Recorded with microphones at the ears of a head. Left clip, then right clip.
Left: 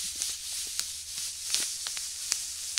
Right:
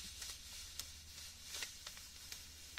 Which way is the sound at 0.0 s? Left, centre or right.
Left.